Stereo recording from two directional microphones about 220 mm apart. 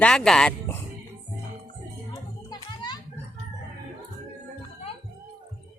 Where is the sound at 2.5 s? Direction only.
20° left (ahead or behind).